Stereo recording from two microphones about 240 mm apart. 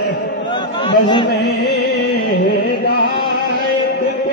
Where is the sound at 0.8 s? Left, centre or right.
Centre.